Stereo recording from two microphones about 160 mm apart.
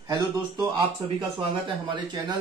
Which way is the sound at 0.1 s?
30° right (ahead or behind).